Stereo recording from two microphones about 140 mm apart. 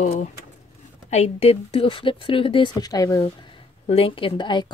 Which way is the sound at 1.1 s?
50° left (ahead or behind).